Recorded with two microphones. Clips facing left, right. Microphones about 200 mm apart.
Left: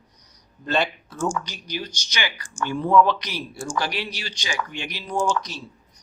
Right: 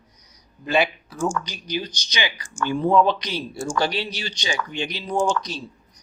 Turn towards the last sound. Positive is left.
turn(degrees=-20)  # may be behind; listen again after turning